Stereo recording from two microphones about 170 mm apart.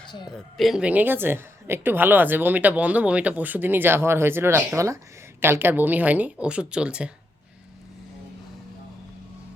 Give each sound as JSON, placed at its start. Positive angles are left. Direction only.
{"t": 0.0, "sound": "speech", "side_deg": 25}
{"t": 0.5, "sound": "a woman's voice", "side_deg": 0}